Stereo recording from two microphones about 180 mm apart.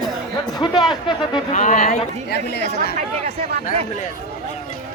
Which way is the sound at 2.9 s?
35° right (ahead or behind).